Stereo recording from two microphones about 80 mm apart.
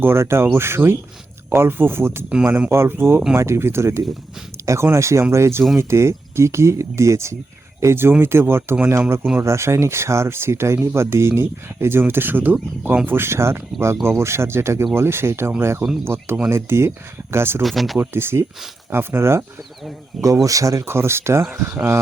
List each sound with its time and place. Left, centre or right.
0.0 s speech: right
17.6 s speech: centre
17.9 s speech: right
20.2 s speech: right